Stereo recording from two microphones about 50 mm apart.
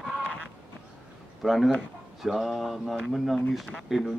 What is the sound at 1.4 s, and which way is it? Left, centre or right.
A man's voice, centre.